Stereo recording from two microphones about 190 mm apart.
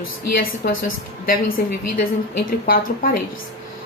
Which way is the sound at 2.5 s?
50° left (ahead or behind).